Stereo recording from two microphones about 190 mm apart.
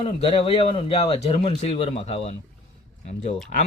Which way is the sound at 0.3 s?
30° left (ahead or behind).